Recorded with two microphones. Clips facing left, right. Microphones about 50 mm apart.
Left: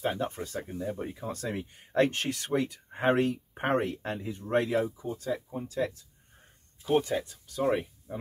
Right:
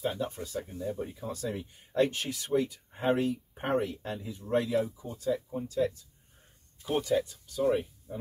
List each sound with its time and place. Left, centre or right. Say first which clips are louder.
0.0 s speech: left 2 dB; left
4.8 s speech: left 6 dB; left
5.1 s speech: right 2 dB; left
6.9 s speech: left 2 dB; left
7.5 s speech: even; left